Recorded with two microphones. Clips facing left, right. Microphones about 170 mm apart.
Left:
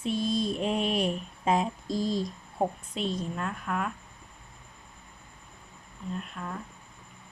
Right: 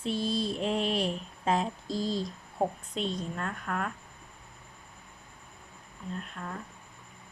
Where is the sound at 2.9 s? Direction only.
35° right (ahead or behind).